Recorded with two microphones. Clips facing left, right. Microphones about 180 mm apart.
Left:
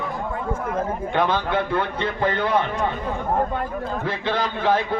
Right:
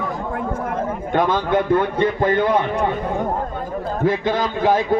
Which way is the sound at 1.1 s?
45° right (ahead or behind).